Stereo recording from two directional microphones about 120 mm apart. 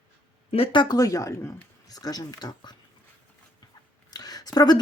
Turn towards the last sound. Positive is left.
turn(degrees=35)  # may be behind; listen again after turning